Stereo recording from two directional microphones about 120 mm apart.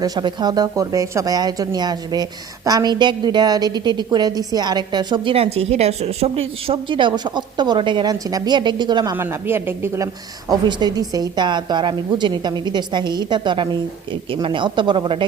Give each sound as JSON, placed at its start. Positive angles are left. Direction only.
{"t": 0.0, "sound": "a woman's voice", "side_deg": -35}
{"t": 9.1, "sound": "a woman's voice", "side_deg": -20}
{"t": 10.5, "sound": "a woman's voice", "side_deg": -35}